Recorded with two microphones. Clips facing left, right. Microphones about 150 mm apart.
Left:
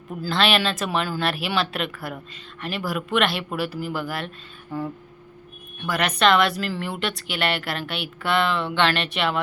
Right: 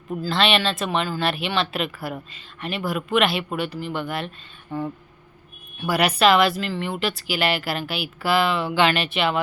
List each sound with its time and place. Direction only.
0.3 s speech: centre (ahead or behind)
5.8 s speech: 10° right (ahead or behind)